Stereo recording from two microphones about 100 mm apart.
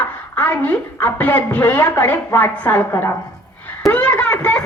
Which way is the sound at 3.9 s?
15° left (ahead or behind).